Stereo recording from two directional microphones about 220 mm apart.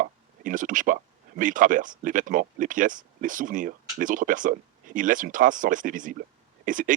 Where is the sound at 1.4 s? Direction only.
35° right (ahead or behind).